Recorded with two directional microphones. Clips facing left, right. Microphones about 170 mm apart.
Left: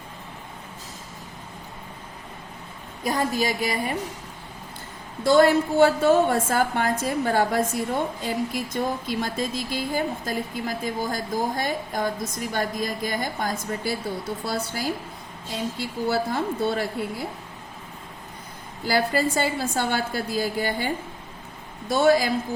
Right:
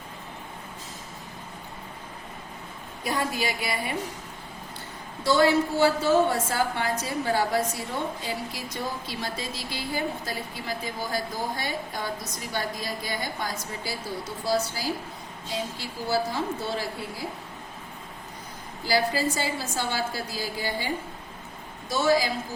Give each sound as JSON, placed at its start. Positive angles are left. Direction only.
{"t": 3.0, "sound": "a woman's voice", "side_deg": 40}
{"t": 5.2, "sound": "a woman's voice", "side_deg": 50}
{"t": 18.9, "sound": "a woman's voice", "side_deg": 55}